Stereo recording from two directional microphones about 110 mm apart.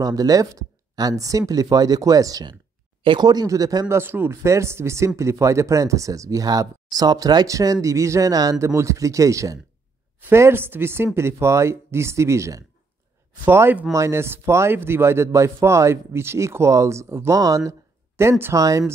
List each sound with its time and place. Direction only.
0.0 s speech: 35° right (ahead or behind)
3.0 s speech: 45° right (ahead or behind)
3.9 s speech: 20° right (ahead or behind)